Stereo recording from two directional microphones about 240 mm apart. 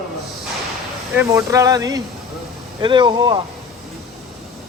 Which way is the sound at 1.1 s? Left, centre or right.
Centre.